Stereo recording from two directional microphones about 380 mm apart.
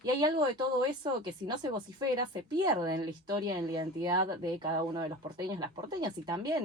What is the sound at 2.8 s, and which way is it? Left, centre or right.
Speech, centre.